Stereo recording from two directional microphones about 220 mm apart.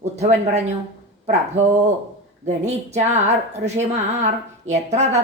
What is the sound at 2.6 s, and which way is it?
A woman's voice, 30° right (ahead or behind).